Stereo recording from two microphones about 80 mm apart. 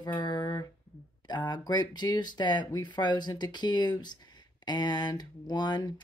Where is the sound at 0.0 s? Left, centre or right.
Left.